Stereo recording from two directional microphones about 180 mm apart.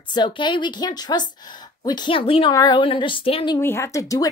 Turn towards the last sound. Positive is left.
turn(degrees=20)  # may be behind; listen again after turning